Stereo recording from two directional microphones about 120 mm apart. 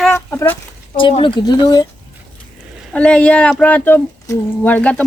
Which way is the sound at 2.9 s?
10° left (ahead or behind).